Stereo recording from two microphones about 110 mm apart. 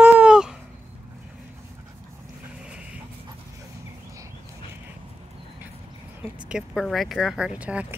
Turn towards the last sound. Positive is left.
turn(degrees=-10)  # may be behind; listen again after turning